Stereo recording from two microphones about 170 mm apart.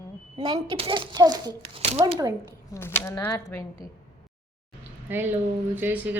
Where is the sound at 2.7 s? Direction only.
15° left (ahead or behind).